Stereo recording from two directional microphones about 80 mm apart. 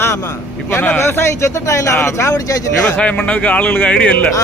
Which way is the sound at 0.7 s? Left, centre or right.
Left.